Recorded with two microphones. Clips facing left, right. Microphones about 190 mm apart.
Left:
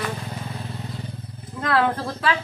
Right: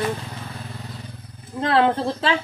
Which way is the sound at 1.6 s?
25° right (ahead or behind).